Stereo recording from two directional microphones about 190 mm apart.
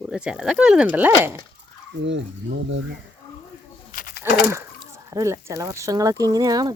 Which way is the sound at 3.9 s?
50° left (ahead or behind).